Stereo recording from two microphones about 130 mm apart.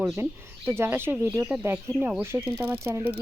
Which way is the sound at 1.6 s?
15° right (ahead or behind).